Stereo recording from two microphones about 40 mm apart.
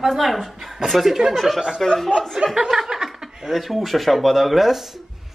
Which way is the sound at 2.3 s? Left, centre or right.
Centre.